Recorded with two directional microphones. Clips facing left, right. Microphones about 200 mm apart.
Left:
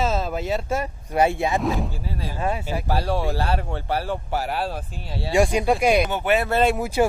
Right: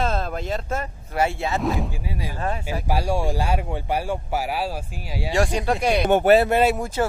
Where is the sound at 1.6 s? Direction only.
Centre (ahead or behind).